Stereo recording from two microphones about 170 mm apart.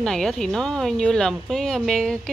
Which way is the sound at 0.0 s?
5° left (ahead or behind).